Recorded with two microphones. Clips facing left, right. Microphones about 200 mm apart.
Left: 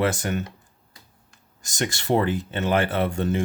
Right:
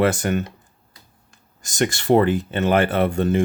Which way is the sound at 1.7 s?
55° right (ahead or behind).